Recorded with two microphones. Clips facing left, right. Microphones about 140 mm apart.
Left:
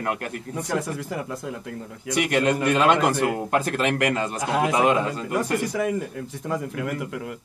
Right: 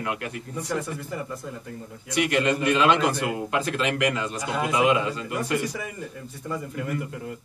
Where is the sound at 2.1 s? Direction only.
50° left (ahead or behind).